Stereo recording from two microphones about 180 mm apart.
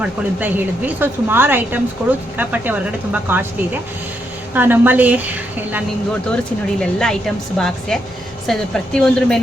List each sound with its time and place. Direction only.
0.0 s speech: 10° right (ahead or behind)
4.5 s speech: 10° right (ahead or behind)
6.3 s a woman's voice: 5° left (ahead or behind)